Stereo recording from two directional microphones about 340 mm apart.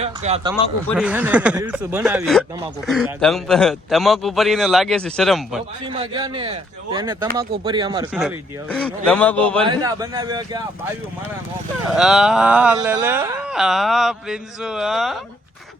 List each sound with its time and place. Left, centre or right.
0.0 s speech: centre
0.9 s speech: centre
5.9 s speech: centre
8.7 s speech: centre
9.6 s speech: centre
11.9 s speech: centre